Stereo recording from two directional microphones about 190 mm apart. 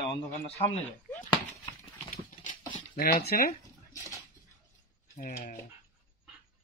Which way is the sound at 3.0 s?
50° left (ahead or behind).